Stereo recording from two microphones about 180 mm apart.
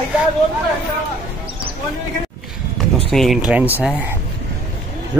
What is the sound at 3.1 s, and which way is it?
Speech, centre (ahead or behind).